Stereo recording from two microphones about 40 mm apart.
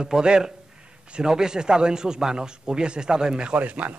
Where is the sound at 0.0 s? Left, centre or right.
Right.